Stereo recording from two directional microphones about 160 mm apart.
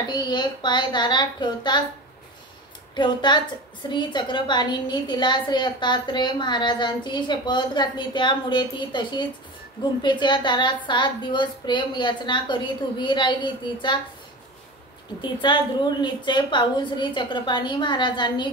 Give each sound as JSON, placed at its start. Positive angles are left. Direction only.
{"t": 0.1, "sound": "a woman's voice", "side_deg": 30}
{"t": 3.0, "sound": "a woman's voice", "side_deg": 30}
{"t": 15.4, "sound": "a woman's voice", "side_deg": 30}